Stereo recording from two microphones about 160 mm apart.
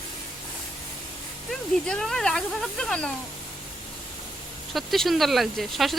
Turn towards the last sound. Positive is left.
turn(degrees=0)  # may be behind; listen again after turning